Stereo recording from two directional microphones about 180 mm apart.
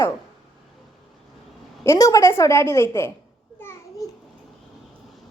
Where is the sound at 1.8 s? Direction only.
20° left (ahead or behind).